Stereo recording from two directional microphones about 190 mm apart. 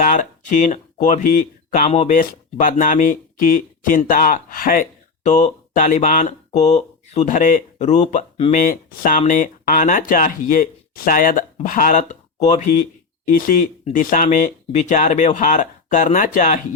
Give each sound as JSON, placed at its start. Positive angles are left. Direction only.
{"t": 0.0, "sound": "speech", "side_deg": 45}